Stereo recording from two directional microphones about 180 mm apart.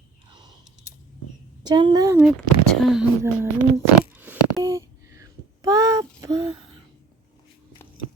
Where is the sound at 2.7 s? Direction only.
Centre (ahead or behind).